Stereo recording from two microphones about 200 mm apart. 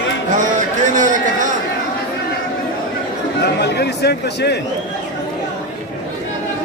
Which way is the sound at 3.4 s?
55° left (ahead or behind).